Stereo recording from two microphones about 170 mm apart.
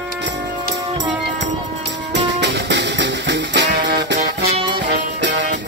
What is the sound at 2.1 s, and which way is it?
Music, 90° right.